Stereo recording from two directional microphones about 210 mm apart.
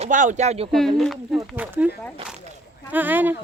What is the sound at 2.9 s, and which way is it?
Speech, 10° right (ahead or behind).